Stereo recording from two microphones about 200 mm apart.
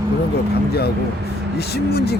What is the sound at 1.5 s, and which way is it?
Speech, 55° left (ahead or behind).